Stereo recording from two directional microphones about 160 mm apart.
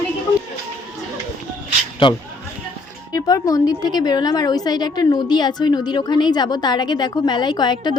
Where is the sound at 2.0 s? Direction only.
30° left (ahead or behind).